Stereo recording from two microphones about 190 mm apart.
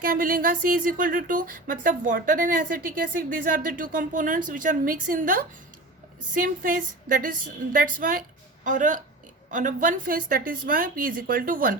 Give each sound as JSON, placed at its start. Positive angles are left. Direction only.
{"t": 0.0, "sound": "speech", "side_deg": -45}